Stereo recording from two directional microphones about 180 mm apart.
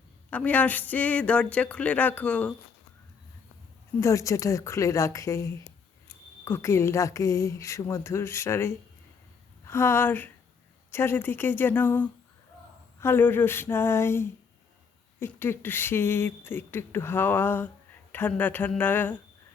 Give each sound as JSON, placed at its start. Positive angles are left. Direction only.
{"t": 0.3, "sound": "speech", "side_deg": 10}
{"t": 4.0, "sound": "speech", "side_deg": 15}